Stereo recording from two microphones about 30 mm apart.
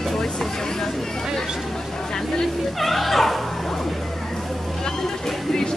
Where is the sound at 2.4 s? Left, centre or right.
Centre.